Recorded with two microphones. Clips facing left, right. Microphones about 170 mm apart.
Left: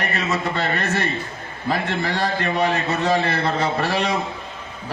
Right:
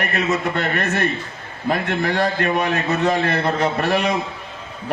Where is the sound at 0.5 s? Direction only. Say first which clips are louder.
Right 2 dB; 60° right (ahead or behind).